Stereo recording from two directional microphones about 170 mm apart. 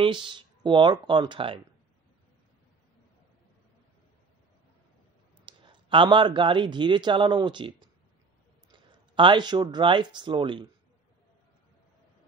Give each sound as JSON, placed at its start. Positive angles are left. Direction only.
{"t": 0.0, "sound": "speech", "side_deg": -30}
{"t": 5.4, "sound": "speech", "side_deg": -30}